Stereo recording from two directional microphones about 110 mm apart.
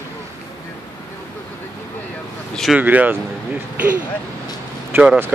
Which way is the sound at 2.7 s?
15° right (ahead or behind).